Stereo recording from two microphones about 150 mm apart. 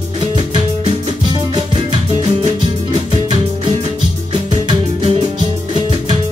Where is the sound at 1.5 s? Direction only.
30° right (ahead or behind).